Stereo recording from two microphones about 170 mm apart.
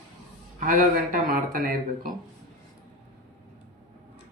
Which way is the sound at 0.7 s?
55° right (ahead or behind).